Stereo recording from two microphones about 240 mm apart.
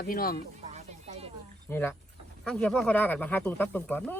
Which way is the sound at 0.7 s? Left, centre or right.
Right.